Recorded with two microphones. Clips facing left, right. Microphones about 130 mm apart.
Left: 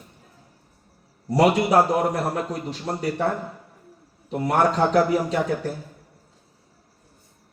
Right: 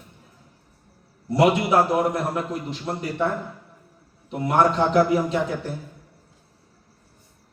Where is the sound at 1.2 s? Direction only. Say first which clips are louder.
Even; 40° left (ahead or behind).